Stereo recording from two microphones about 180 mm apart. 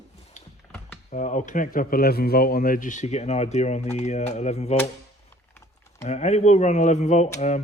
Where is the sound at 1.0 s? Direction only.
40° left (ahead or behind).